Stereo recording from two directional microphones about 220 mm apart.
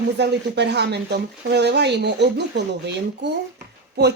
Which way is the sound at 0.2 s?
50° right (ahead or behind).